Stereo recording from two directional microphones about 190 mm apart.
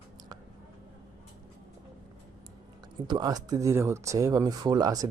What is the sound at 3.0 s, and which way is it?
Speech, 20° right (ahead or behind).